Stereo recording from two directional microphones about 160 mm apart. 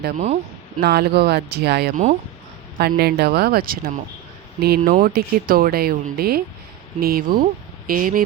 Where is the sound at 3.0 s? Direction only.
85° right.